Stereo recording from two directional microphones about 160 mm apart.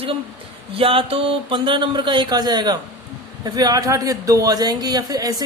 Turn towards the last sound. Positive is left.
turn(degrees=-25)  # may be behind; listen again after turning